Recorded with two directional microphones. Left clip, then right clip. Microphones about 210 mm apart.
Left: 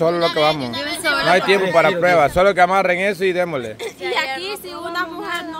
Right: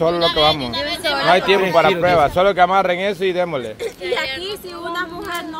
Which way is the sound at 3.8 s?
40° left (ahead or behind).